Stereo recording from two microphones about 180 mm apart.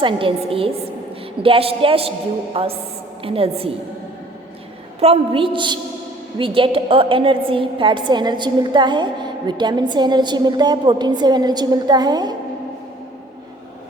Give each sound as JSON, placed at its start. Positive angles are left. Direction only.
{"t": 0.0, "sound": "a woman's voice", "side_deg": -30}
{"t": 4.9, "sound": "a woman's voice", "side_deg": -35}